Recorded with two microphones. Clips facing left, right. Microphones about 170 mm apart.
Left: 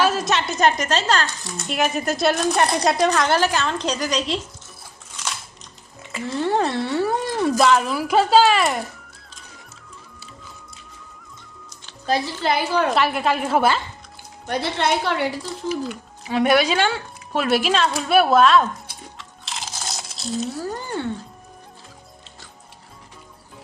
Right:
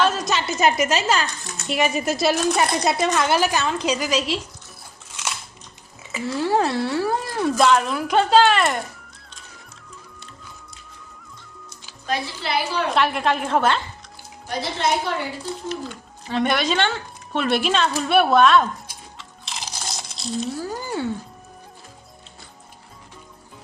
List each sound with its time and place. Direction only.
0.0 s a woman's voice: 5° left (ahead or behind)
6.1 s a woman's voice: 5° right (ahead or behind)
12.0 s a woman's voice: 40° left (ahead or behind)
12.9 s a woman's voice: centre (ahead or behind)
14.4 s a woman's voice: 65° left (ahead or behind)
16.2 s a woman's voice: 5° left (ahead or behind)
19.1 s crunch: centre (ahead or behind)